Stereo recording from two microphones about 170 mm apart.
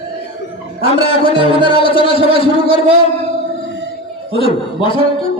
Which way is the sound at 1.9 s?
30° left (ahead or behind).